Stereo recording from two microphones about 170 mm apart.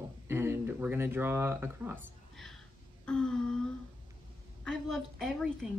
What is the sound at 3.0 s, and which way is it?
Speech, 5° left (ahead or behind).